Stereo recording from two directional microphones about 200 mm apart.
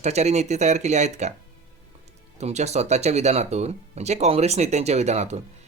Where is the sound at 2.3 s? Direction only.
35° right (ahead or behind).